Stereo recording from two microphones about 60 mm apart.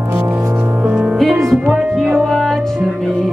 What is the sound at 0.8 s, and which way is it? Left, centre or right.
Music, right.